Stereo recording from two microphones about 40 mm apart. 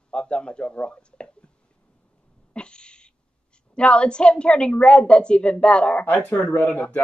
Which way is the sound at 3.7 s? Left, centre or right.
Left.